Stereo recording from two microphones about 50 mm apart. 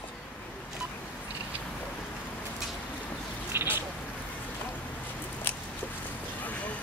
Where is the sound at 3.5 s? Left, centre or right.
Right.